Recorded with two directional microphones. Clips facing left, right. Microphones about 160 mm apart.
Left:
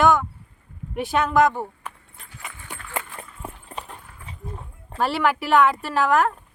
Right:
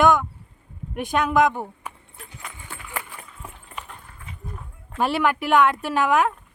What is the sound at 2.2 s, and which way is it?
Horse, 5° right (ahead or behind).